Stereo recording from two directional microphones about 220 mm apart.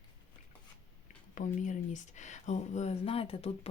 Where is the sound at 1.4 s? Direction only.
35° left (ahead or behind).